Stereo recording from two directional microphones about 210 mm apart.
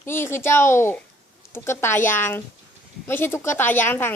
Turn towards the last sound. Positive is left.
turn(degrees=10)  # may be behind; listen again after turning